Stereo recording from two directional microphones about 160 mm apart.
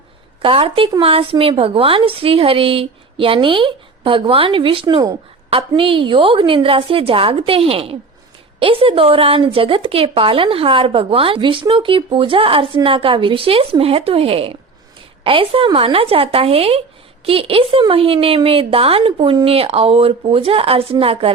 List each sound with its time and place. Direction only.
0.4 s speech: 35° right (ahead or behind)